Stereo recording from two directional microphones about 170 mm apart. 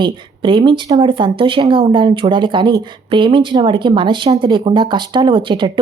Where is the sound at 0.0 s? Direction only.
30° right (ahead or behind).